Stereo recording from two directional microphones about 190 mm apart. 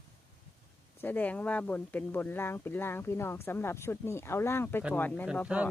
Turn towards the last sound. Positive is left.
turn(degrees=-5)  # may be behind; listen again after turning